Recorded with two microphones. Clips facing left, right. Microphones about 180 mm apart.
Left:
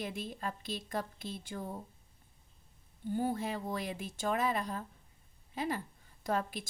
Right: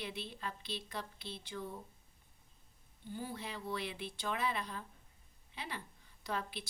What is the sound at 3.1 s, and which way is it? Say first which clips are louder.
Speech: left 10 dB; 45° left (ahead or behind).